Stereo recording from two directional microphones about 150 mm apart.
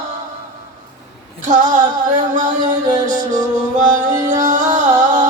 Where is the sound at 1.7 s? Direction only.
55° right (ahead or behind).